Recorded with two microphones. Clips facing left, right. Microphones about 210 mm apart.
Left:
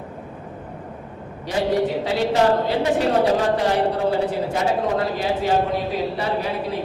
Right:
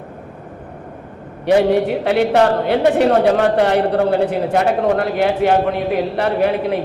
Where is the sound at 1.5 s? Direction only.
65° right (ahead or behind).